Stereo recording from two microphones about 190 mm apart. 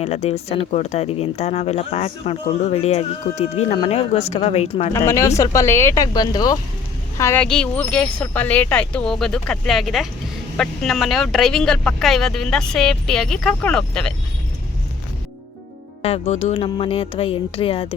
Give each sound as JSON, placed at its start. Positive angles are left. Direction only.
{"t": 0.0, "sound": "speech", "side_deg": 35}
{"t": 4.9, "sound": "speech", "side_deg": 15}
{"t": 7.2, "sound": "speech", "side_deg": 10}
{"t": 16.0, "sound": "speech", "side_deg": 35}